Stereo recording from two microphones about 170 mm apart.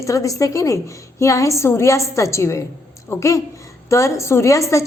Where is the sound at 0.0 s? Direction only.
20° left (ahead or behind).